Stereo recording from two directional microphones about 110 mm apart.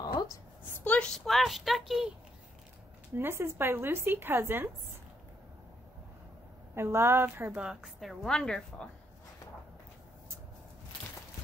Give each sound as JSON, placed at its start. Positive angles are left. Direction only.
{"t": 0.8, "sound": "a woman's voice", "side_deg": 10}
{"t": 3.2, "sound": "a woman's voice", "side_deg": -20}
{"t": 6.7, "sound": "a woman's voice", "side_deg": -25}
{"t": 7.5, "sound": "a woman's voice", "side_deg": -5}